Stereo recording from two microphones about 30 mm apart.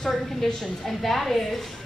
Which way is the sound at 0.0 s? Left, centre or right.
Centre.